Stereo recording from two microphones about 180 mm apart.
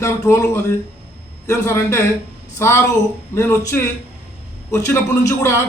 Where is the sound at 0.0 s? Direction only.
15° left (ahead or behind).